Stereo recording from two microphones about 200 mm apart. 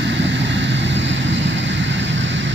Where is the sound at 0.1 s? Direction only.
65° right (ahead or behind).